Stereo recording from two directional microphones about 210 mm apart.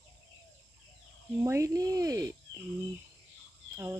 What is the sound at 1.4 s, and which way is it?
Speech, 15° right (ahead or behind).